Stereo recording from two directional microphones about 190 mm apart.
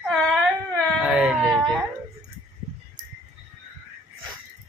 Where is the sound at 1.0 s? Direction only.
5° right (ahead or behind).